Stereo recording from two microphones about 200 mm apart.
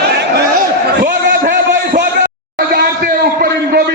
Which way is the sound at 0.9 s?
55° right (ahead or behind).